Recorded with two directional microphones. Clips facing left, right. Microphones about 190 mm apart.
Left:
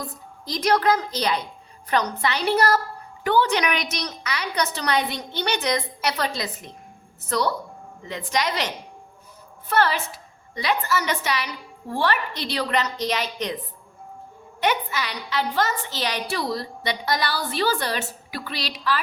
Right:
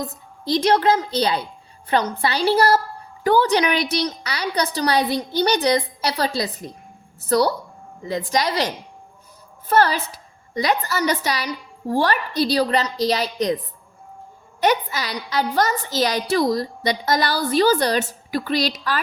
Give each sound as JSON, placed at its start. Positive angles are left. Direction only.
{"t": 0.0, "sound": "a woman's voice", "side_deg": -25}
{"t": 14.6, "sound": "a woman's voice", "side_deg": -40}